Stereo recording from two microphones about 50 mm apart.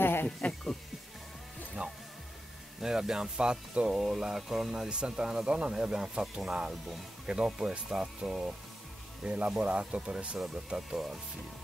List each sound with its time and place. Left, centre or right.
0.0 s a sound: left
1.8 s music: right
2.8 s speech: centre
10.4 s speech: centre